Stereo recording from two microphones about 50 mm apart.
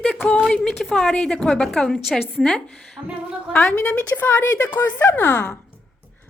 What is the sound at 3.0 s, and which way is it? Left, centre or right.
Speech, right.